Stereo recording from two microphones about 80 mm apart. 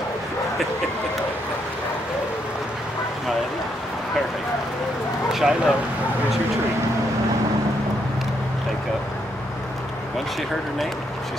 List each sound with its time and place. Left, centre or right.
5.3 s speech: centre